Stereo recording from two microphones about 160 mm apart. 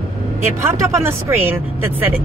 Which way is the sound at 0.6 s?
15° right (ahead or behind).